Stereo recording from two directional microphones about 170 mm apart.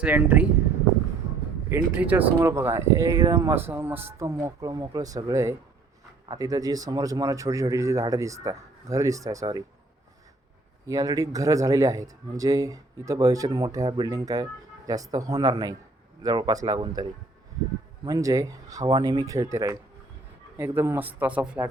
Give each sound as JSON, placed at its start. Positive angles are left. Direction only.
{"t": 0.0, "sound": "speech", "side_deg": -10}
{"t": 1.7, "sound": "a man's voice", "side_deg": -10}
{"t": 10.8, "sound": "a man's voice", "side_deg": -20}